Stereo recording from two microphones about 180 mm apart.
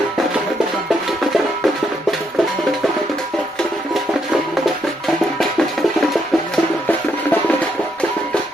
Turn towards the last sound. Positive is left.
turn(degrees=10)  # may be behind; listen again after turning